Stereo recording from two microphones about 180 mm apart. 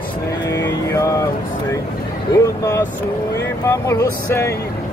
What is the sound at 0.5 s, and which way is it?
Speech, 15° left (ahead or behind).